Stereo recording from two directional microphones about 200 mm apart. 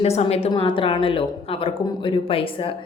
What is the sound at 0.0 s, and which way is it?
A woman's voice, 30° left (ahead or behind).